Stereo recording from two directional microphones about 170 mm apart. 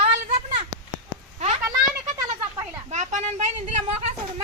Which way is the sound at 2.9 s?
40° right (ahead or behind).